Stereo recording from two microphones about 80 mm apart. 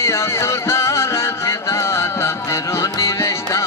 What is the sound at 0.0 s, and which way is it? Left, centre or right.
Music, left.